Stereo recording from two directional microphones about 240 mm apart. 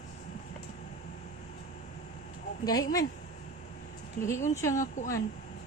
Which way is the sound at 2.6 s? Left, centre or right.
Centre.